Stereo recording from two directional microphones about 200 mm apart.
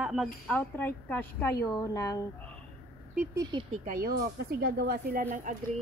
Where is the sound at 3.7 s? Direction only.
40° right (ahead or behind).